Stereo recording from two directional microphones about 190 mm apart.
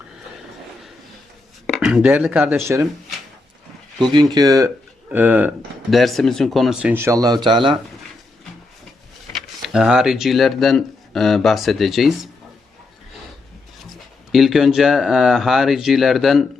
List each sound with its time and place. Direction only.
1.6 s speech: centre (ahead or behind)
4.1 s speech: 20° right (ahead or behind)
9.6 s speech: centre (ahead or behind)
14.3 s speech: centre (ahead or behind)